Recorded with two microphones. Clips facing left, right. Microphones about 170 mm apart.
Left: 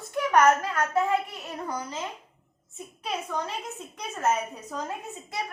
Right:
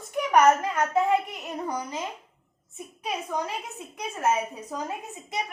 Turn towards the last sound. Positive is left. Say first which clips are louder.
# right 1 dB
turn(degrees=-15)  # may be behind; listen again after turning